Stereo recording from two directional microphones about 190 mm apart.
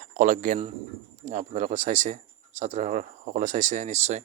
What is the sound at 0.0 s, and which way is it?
Speech, 40° right (ahead or behind).